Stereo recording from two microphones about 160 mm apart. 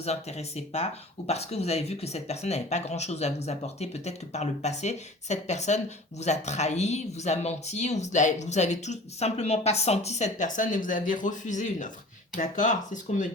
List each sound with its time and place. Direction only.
0.0 s speech: 40° left (ahead or behind)